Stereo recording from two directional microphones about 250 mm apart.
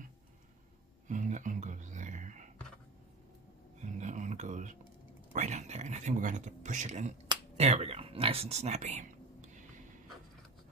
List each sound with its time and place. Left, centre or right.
1.0 s whispering: right
3.8 s music: right
5.3 s speech: right